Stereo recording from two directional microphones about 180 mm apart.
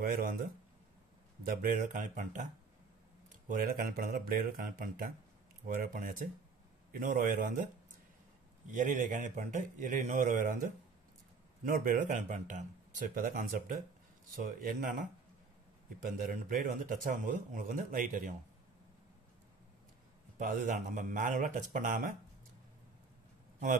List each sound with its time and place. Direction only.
0.0 s speech: 50° right (ahead or behind)
20.3 s speech: 45° right (ahead or behind)